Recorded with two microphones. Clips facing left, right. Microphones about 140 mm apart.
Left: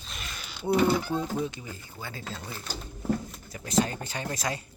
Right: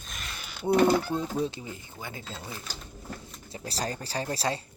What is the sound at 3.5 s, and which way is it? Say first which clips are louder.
Speech: left 6 dB; 35° right (ahead or behind).